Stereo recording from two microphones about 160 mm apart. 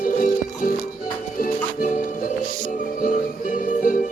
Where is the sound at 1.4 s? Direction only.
60° left (ahead or behind).